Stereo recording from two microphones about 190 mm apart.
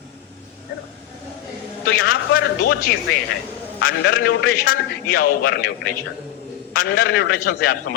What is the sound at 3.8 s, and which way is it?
A man's voice, 75° left (ahead or behind).